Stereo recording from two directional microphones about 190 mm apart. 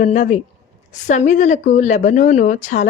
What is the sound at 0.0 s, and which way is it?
Speech, 40° left (ahead or behind).